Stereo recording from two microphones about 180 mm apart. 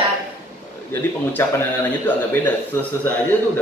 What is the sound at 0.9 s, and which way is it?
A man's voice, 10° left (ahead or behind).